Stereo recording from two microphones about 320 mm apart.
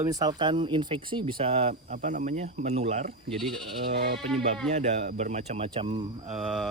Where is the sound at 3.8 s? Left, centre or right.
Right.